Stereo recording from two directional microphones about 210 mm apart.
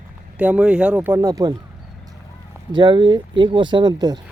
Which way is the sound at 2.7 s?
20° right (ahead or behind).